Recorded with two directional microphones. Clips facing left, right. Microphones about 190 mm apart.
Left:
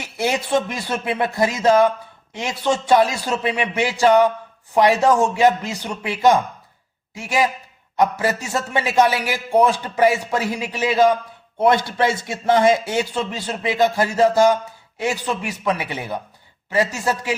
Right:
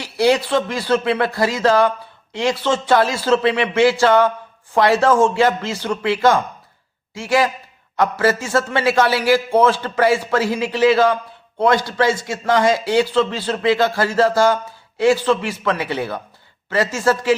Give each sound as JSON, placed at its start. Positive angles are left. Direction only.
{"t": 0.3, "sound": "a man's voice", "side_deg": 20}
{"t": 12.3, "sound": "a man's voice", "side_deg": 20}